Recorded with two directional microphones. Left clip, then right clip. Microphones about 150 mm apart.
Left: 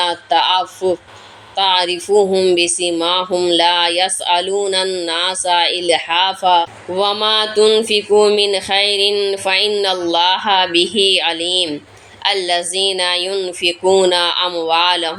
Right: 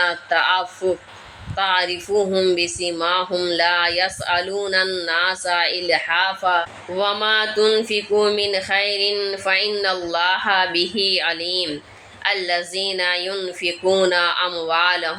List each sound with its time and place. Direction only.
0.0 s speech: 35° left (ahead or behind)